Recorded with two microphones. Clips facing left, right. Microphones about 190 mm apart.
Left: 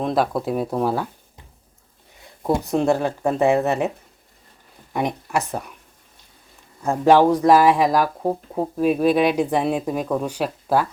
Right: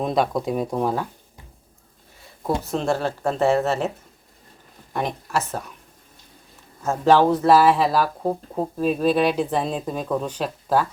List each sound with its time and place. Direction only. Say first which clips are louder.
0.0 s speech: left 1 dB; centre (ahead or behind)
2.5 s speech: left 4 dB; 15° left (ahead or behind)
4.9 s speech: left 2 dB; 15° left (ahead or behind)
6.8 s speech: left 2 dB; 15° left (ahead or behind)